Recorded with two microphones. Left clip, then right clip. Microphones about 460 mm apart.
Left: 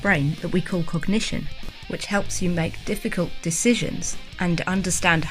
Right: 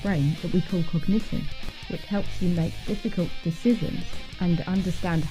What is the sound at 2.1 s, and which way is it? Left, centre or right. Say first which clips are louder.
Speech: left 5 dB; left.